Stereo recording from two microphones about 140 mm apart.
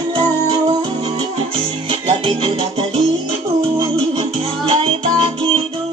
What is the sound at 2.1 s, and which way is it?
Music, 40° right (ahead or behind).